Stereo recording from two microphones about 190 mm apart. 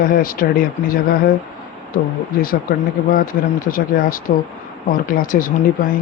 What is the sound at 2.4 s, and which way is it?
Speech, 50° left (ahead or behind).